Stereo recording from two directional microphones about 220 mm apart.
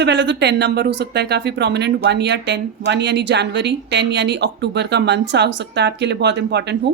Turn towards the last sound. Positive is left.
turn(degrees=-50)  # may be behind; listen again after turning